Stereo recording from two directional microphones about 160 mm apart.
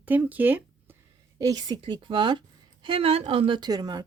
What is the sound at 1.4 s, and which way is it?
Speech, 25° right (ahead or behind).